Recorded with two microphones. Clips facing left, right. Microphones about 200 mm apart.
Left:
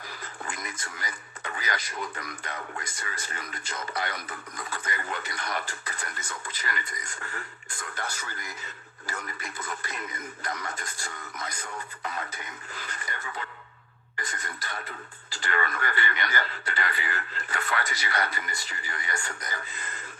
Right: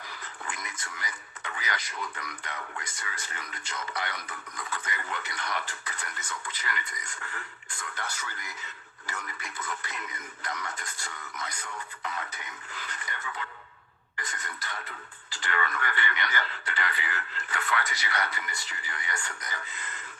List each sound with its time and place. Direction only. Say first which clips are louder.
0.4 s radio: left 2 dB; 40° left (ahead or behind)
2.0 s speech: left 3 dB; 40° left (ahead or behind)